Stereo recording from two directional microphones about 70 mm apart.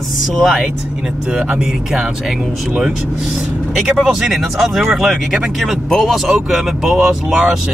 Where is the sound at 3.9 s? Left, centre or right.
Centre.